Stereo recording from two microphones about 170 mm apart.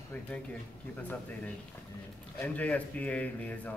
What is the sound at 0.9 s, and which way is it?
Speech, 10° left (ahead or behind).